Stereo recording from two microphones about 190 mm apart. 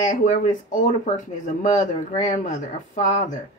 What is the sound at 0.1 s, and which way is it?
Speech, 40° left (ahead or behind).